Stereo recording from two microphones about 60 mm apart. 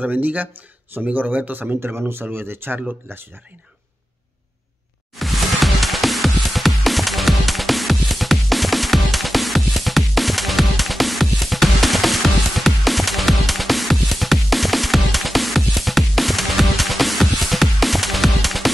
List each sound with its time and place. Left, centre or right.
0.0 s speech: right
2.0 s speech: right
5.1 s music: centre